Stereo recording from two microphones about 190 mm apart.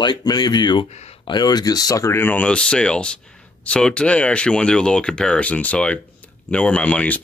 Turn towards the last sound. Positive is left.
turn(degrees=5)  # may be behind; listen again after turning